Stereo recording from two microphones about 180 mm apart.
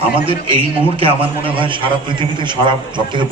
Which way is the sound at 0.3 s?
30° right (ahead or behind).